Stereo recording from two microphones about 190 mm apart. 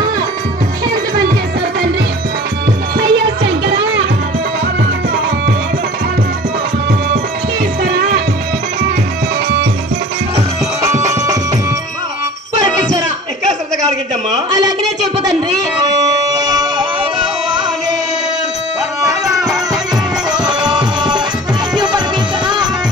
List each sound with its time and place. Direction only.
3.0 s music: 65° right (ahead or behind)
7.8 s music: 60° right (ahead or behind)
10.8 s music: 15° right (ahead or behind)
16.3 s siren: 20° right (ahead or behind)
20.4 s music: 25° right (ahead or behind)